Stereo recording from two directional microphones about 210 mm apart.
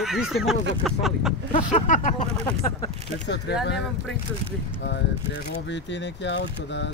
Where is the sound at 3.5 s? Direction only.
50° left (ahead or behind).